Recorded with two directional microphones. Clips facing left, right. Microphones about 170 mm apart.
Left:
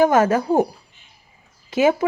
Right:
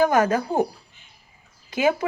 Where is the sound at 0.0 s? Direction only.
25° left (ahead or behind).